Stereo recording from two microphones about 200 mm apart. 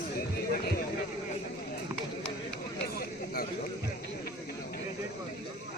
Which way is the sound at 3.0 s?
50° left (ahead or behind).